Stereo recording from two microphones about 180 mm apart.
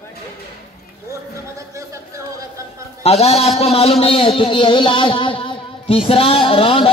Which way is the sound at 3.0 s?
35° left (ahead or behind).